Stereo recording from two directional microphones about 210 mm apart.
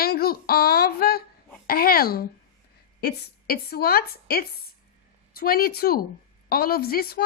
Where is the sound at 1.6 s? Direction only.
45° left (ahead or behind).